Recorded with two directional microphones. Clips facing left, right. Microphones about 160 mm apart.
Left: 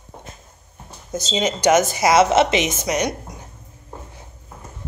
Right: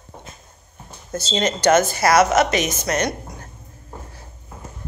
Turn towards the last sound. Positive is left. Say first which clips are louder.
# even
turn(degrees=15)  # may be behind; listen again after turning